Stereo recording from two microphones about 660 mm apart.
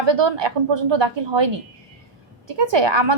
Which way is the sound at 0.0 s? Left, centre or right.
Right.